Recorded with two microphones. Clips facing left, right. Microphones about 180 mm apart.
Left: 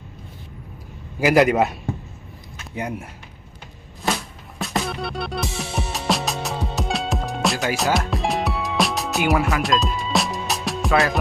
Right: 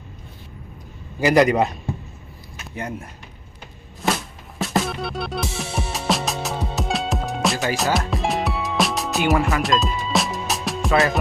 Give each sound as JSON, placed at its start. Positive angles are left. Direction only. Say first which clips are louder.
{"t": 1.2, "sound": "a man's voice", "louder": "even", "side_deg": 5}
{"t": 4.6, "sound": "music", "louder": "right 2 dB", "side_deg": 0}